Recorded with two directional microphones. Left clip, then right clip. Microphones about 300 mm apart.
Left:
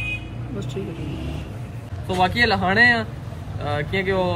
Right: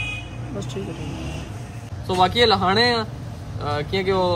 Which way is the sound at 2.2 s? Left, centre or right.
Centre.